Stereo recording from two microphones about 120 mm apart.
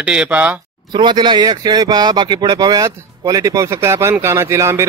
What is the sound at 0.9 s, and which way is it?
Speech, 40° right (ahead or behind).